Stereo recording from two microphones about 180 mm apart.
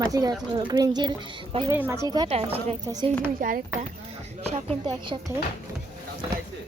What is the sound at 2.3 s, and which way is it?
Speech, 35° right (ahead or behind).